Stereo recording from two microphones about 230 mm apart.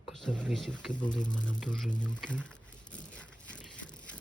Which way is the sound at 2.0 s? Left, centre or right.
Centre.